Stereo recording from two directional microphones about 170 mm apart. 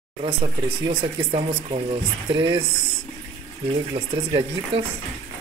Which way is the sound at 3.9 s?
30° right (ahead or behind).